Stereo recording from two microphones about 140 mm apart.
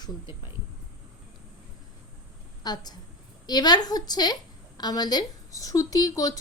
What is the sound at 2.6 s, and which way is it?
Speech, 30° left (ahead or behind).